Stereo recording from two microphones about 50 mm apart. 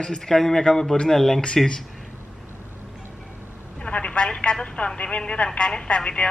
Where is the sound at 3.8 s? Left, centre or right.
Left.